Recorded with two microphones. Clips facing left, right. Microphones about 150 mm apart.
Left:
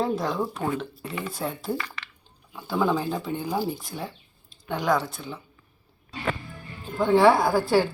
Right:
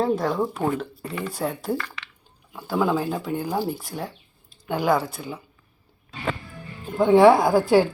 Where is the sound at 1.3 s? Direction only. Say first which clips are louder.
Right 4 dB; 10° right (ahead or behind).